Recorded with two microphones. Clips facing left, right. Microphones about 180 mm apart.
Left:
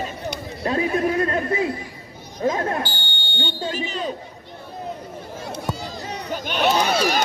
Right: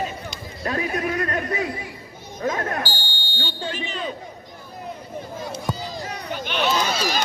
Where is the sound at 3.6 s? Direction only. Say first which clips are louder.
Left 2 dB; 40° left (ahead or behind).